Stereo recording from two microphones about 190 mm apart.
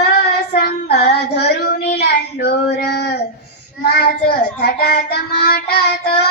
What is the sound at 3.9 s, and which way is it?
Child singing, 55° left (ahead or behind).